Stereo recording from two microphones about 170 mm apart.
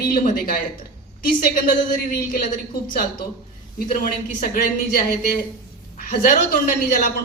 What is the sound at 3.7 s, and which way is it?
Speech, 55° left (ahead or behind).